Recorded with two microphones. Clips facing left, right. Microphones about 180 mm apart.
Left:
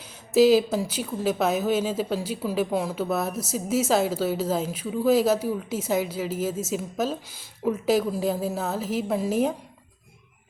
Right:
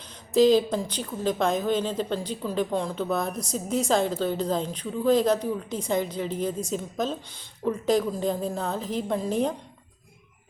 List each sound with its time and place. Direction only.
0.3 s speech: 5° left (ahead or behind)